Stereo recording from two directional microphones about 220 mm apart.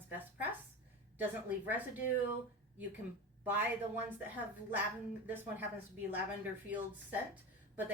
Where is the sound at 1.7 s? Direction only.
10° right (ahead or behind).